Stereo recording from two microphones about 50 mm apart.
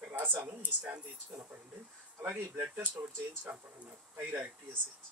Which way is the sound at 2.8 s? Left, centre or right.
Right.